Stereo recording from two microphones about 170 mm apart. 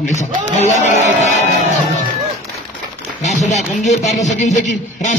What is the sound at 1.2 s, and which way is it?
Speech, 45° left (ahead or behind).